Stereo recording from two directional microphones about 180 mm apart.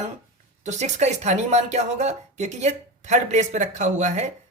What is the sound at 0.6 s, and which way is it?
Speech, 40° right (ahead or behind).